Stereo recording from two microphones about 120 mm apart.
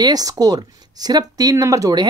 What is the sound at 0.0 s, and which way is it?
Speech, 30° right (ahead or behind).